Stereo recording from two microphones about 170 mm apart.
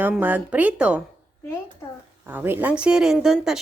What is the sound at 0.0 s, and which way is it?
A woman's voice, 10° right (ahead or behind).